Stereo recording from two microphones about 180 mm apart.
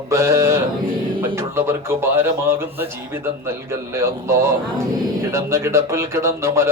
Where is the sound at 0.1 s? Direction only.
15° right (ahead or behind).